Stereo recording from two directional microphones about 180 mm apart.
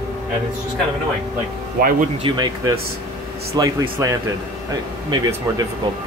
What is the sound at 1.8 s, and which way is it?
Speech, 55° right (ahead or behind).